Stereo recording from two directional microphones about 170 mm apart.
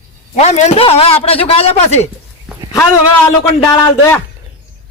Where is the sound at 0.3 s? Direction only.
40° left (ahead or behind).